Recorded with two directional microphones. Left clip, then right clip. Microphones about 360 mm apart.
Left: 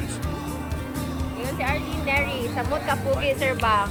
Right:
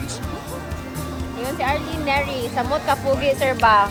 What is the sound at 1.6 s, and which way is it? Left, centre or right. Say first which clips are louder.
Music: right 5 dB; right.